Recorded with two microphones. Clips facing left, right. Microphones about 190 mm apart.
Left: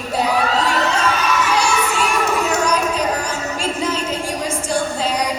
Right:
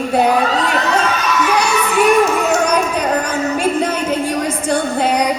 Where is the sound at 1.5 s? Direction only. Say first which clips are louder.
Right 3 dB; 60° right (ahead or behind).